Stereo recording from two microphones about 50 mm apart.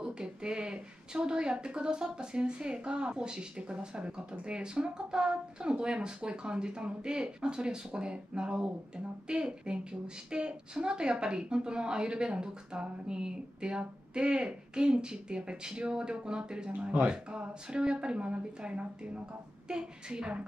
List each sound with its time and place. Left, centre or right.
0.0 s a woman's voice: centre